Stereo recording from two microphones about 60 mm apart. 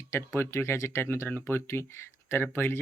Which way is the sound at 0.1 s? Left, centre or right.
Left.